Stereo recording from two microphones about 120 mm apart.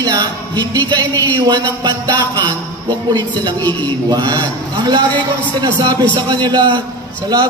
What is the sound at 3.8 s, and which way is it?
A man's voice, 35° right (ahead or behind).